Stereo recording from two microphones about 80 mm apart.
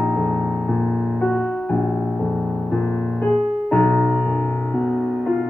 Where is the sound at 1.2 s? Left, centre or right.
Centre.